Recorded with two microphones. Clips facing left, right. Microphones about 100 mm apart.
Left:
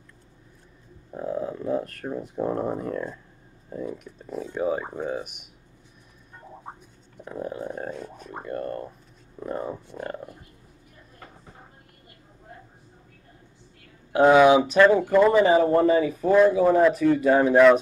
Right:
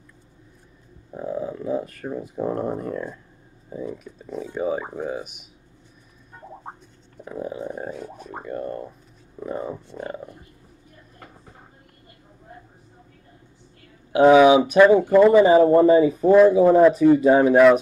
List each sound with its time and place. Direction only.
1.1 s speech: centre (ahead or behind)
7.2 s a sound: 5° right (ahead or behind)
8.4 s speech: 10° right (ahead or behind)
14.1 s speech: 10° right (ahead or behind)
17.4 s speech: 5° right (ahead or behind)